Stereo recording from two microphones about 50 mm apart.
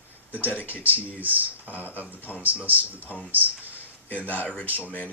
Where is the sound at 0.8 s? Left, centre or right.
Right.